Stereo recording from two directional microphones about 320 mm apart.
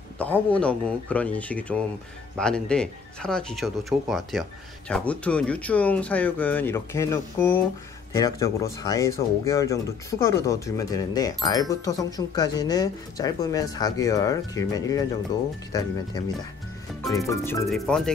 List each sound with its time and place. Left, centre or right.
0.2 s speech: centre
17.3 s speech: centre